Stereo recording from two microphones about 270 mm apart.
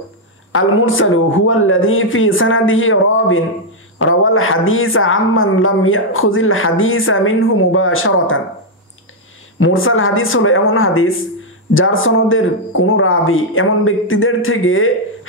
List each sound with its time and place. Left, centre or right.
0.5 s speech: left
9.6 s speech: left